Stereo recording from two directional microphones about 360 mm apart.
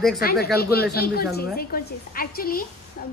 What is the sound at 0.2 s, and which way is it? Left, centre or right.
A woman's voice, left.